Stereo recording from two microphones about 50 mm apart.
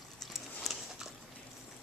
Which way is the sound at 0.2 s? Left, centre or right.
Centre.